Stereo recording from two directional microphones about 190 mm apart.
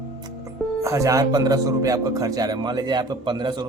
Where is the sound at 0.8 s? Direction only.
15° right (ahead or behind).